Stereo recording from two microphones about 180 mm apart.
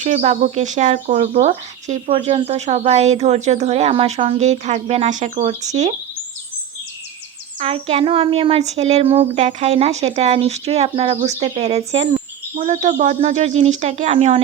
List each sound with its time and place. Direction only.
0.0 s speech: 40° right (ahead or behind)
7.6 s speech: 35° right (ahead or behind)